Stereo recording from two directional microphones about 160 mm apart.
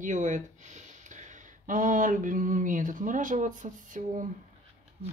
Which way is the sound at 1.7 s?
55° right (ahead or behind).